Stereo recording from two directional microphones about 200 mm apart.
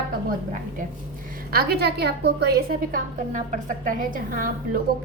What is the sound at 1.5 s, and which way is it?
A woman's voice, 50° right (ahead or behind).